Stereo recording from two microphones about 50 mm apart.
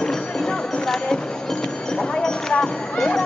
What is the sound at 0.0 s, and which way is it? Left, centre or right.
Music, centre.